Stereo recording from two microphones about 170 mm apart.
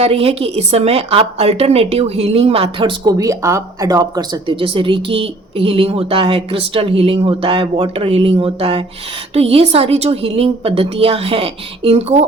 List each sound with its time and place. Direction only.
0.0 s a woman's voice: 35° right (ahead or behind)